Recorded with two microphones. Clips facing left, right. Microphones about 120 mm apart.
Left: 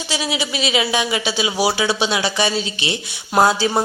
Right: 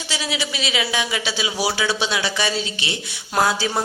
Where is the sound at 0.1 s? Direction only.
20° left (ahead or behind).